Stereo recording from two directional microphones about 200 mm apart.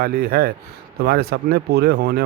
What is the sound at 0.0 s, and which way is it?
Speech, 50° right (ahead or behind).